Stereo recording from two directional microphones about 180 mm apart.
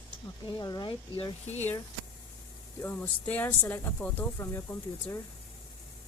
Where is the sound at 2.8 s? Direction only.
10° left (ahead or behind).